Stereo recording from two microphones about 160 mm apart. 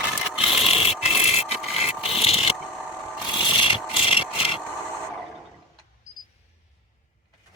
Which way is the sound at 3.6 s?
35° left (ahead or behind).